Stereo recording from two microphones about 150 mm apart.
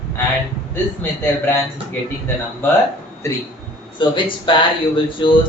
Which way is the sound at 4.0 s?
35° left (ahead or behind).